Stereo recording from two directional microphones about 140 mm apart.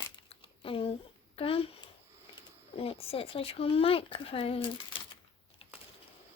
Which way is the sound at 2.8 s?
45° left (ahead or behind).